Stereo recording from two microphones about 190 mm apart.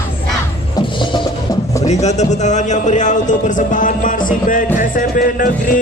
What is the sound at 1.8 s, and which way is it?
A man's voice, 35° left (ahead or behind).